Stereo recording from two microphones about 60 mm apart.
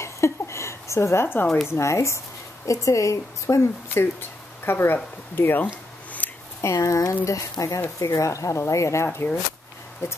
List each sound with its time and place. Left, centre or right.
0.0 s a sound: left
1.2 s speech: left
1.7 s a woman's voice: left
2.6 s speech: left
6.2 s a sound: left
6.6 s speech: left
10.0 s speech: left